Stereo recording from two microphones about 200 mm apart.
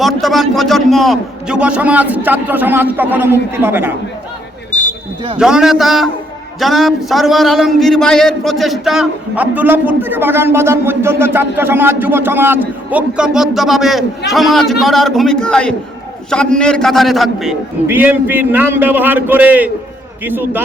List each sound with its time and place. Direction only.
0.0 s a man's voice: centre (ahead or behind)
4.7 s a sound: 40° left (ahead or behind)
5.4 s a man's voice: 5° right (ahead or behind)